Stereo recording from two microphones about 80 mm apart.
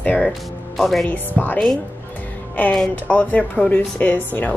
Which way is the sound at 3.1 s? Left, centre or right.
Centre.